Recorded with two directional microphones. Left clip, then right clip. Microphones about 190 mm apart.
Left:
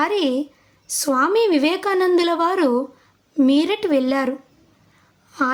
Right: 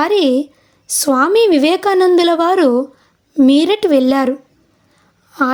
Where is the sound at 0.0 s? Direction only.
35° right (ahead or behind).